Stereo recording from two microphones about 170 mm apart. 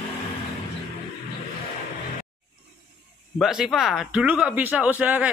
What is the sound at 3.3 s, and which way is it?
Speech, 5° right (ahead or behind).